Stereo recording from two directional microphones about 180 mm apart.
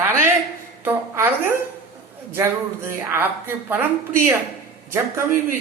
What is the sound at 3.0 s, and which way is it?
Speech, 10° right (ahead or behind).